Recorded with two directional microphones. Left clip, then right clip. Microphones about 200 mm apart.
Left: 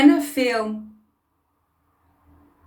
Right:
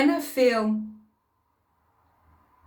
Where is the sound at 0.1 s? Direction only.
20° right (ahead or behind).